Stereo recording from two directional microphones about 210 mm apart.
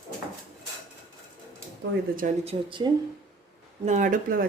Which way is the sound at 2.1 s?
40° right (ahead or behind).